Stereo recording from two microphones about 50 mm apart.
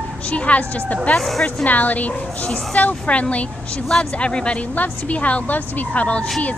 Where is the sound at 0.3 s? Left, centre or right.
Left.